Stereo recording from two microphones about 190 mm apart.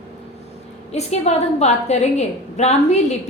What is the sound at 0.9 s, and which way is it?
A woman's voice, 35° left (ahead or behind).